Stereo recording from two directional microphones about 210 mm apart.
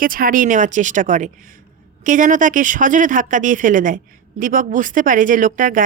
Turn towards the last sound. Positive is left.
turn(degrees=-40)  # may be behind; listen again after turning